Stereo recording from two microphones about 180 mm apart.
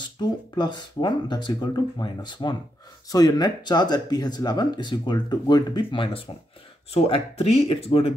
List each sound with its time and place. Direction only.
0.0 s speech: 25° left (ahead or behind)